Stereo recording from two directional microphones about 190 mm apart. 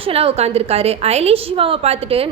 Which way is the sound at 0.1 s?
30° right (ahead or behind).